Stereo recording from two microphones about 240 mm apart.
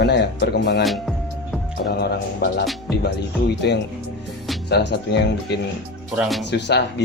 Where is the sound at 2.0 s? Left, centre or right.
Left.